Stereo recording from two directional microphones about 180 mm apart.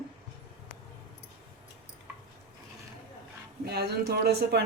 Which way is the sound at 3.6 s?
60° right (ahead or behind).